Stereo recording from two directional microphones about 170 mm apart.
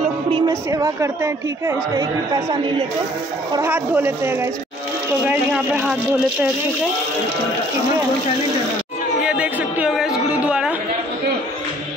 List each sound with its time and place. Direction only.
0.5 s speech: 20° right (ahead or behind)
3.5 s speech: 15° right (ahead or behind)
9.2 s chatter: 5° right (ahead or behind)